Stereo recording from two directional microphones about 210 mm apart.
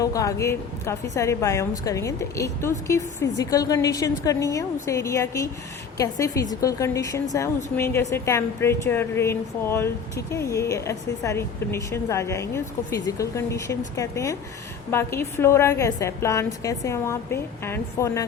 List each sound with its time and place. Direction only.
0.0 s a woman's voice: 15° left (ahead or behind)